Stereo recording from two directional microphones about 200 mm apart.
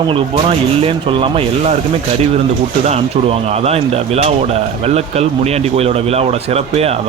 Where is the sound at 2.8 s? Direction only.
30° right (ahead or behind).